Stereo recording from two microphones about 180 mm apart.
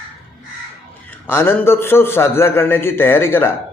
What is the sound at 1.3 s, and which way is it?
A man's voice, 15° left (ahead or behind).